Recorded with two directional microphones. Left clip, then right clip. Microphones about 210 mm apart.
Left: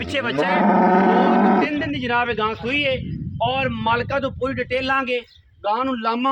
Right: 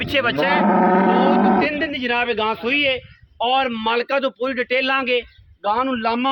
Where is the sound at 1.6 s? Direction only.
45° right (ahead or behind).